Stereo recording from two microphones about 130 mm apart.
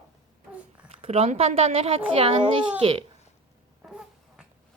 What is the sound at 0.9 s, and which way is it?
Speech, 50° right (ahead or behind).